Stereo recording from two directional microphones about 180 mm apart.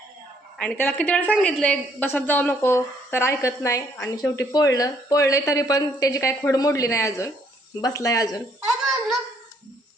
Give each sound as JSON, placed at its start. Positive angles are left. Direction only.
{"t": 0.6, "sound": "a woman's voice", "side_deg": 10}
{"t": 8.8, "sound": "babbling", "side_deg": 0}